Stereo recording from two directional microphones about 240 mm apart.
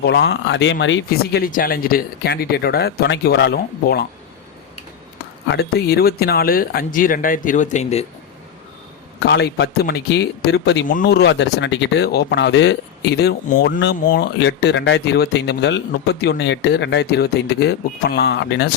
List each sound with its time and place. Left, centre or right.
0.0 s speech: left
5.5 s speech: left
9.2 s speech: left